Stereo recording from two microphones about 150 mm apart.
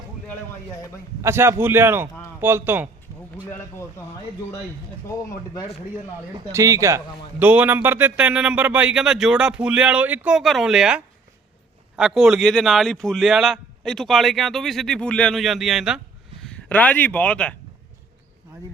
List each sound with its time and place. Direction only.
1.2 s a man's voice: 15° right (ahead or behind)
5.3 s speech: 20° left (ahead or behind)
6.5 s a man's voice: 20° right (ahead or behind); by 16.0 s 5° right (ahead or behind)
16.4 s speech: 5° left (ahead or behind)